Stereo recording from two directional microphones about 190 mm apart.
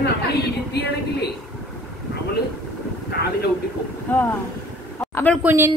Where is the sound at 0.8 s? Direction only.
60° left (ahead or behind).